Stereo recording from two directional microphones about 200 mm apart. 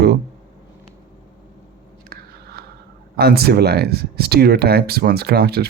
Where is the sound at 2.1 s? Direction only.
50° right (ahead or behind).